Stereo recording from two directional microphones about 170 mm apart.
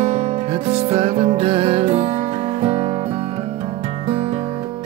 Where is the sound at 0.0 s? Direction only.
35° right (ahead or behind).